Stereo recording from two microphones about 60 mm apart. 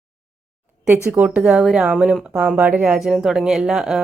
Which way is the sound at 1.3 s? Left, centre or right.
Centre.